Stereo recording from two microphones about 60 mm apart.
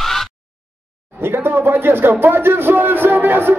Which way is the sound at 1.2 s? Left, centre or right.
Right.